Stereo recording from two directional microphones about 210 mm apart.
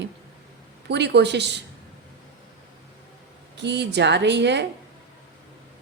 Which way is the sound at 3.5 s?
55° right (ahead or behind).